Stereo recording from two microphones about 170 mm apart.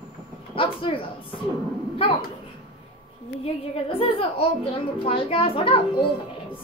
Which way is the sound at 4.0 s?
35° left (ahead or behind).